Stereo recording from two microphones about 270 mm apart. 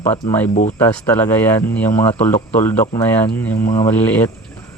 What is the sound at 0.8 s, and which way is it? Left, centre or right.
Speech, centre.